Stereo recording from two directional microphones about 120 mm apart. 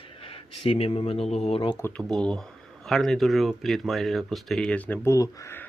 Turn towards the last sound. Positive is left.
turn(degrees=20)  # may be behind; listen again after turning